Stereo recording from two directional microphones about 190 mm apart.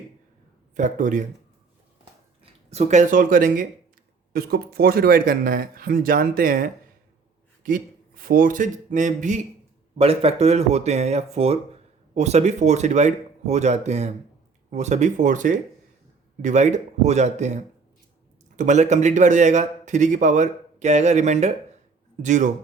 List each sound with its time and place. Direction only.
0.8 s a man's voice: 40° right (ahead or behind)
2.4 s a man's voice: 35° right (ahead or behind)